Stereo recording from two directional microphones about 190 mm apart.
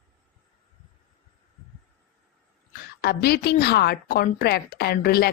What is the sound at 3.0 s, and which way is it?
A woman's voice, 55° left (ahead or behind).